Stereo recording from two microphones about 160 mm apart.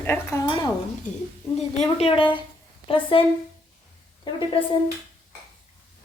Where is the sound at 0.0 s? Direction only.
15° left (ahead or behind).